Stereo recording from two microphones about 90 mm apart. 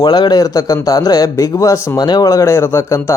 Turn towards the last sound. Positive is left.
turn(degrees=30)  # may be behind; listen again after turning